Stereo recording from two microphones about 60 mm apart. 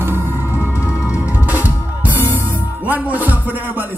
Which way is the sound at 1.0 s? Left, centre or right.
Right.